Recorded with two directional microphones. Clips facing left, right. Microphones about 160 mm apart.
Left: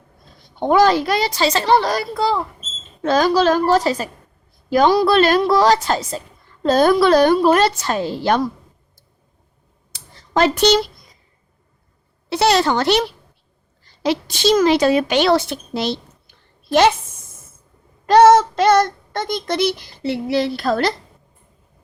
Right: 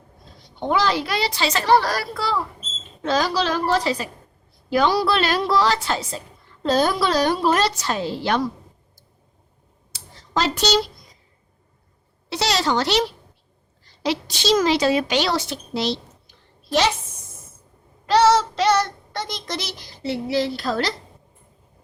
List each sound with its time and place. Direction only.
0.4 s a woman's voice: 50° left (ahead or behind)
1.6 s speech: 20° left (ahead or behind)
3.0 s a woman's voice: 50° left (ahead or behind)
9.9 s a sound: 55° left (ahead or behind)
12.3 s a woman's voice: 55° left (ahead or behind)
18.0 s a woman's voice: 50° left (ahead or behind)